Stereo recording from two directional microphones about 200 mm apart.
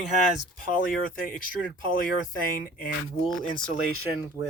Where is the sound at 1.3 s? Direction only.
45° left (ahead or behind).